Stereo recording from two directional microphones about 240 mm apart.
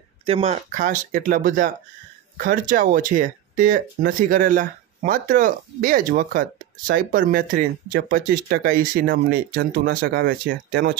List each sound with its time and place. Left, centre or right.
0.3 s speech: right